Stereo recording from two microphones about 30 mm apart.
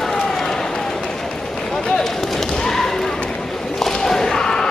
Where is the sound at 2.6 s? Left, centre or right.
Centre.